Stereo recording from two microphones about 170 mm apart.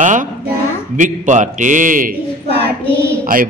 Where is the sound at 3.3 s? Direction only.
55° right (ahead or behind).